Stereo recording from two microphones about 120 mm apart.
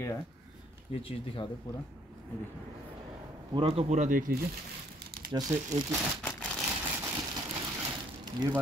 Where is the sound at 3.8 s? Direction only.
90° right.